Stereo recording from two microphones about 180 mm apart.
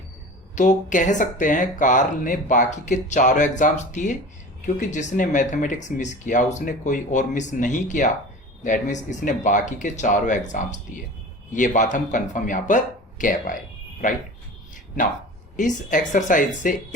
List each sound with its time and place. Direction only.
0.5 s speech: 45° left (ahead or behind)
15.5 s speech: 45° left (ahead or behind)